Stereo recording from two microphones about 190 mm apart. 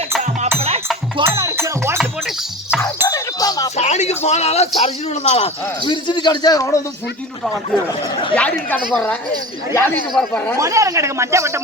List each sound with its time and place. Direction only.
1.2 s music: 15° right (ahead or behind)
2.0 s music: centre (ahead or behind)
3.1 s a sound: 20° left (ahead or behind)
3.8 s a sound: 35° left (ahead or behind)
4.8 s a man's voice: 35° left (ahead or behind)
5.9 s a man's voice: 25° left (ahead or behind)
7.9 s a man's voice: 25° left (ahead or behind)
8.4 s a woman's voice: 5° left (ahead or behind)
10.6 s speech: 15° right (ahead or behind)